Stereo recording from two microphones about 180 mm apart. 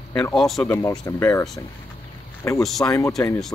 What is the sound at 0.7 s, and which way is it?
Speech, 15° left (ahead or behind).